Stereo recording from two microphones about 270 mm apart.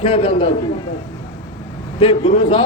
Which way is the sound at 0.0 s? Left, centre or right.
Left.